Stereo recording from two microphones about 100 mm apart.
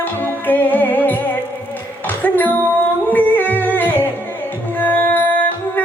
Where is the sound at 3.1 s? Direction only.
20° left (ahead or behind).